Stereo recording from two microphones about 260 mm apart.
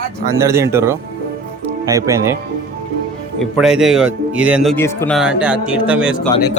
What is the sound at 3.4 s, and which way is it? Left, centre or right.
Speech, centre.